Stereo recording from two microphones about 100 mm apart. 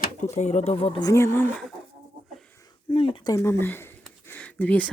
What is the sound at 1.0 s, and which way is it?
Speech, 25° left (ahead or behind).